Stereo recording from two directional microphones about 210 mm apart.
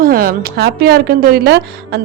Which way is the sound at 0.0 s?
45° right (ahead or behind).